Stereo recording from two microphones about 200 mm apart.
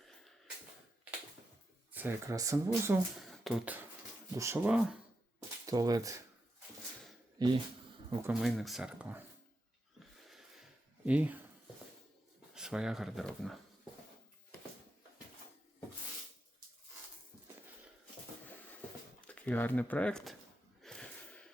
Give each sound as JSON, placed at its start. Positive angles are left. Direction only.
{"t": 1.9, "sound": "speech", "side_deg": -10}
{"t": 3.2, "sound": "speech", "side_deg": 0}
{"t": 5.6, "sound": "speech", "side_deg": -20}
{"t": 7.3, "sound": "speech", "side_deg": -20}
{"t": 8.3, "sound": "speech", "side_deg": 0}
{"t": 10.2, "sound": "a sound", "side_deg": 0}
{"t": 12.5, "sound": "speech", "side_deg": -5}
{"t": 19.3, "sound": "speech", "side_deg": 10}
{"t": 20.8, "sound": "gasp", "side_deg": 5}